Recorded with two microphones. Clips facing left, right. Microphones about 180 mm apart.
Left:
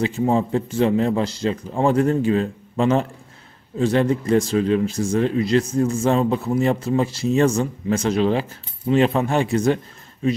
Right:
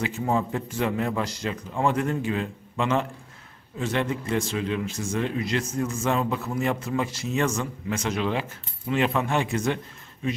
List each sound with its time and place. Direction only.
0.0 s speech: 30° left (ahead or behind)